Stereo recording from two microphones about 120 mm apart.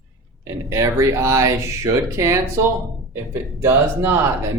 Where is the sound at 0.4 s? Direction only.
25° right (ahead or behind).